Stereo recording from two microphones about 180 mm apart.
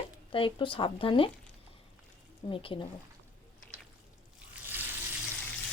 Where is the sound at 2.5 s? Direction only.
30° left (ahead or behind).